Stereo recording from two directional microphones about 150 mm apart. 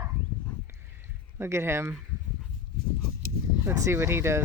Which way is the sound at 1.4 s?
15° right (ahead or behind).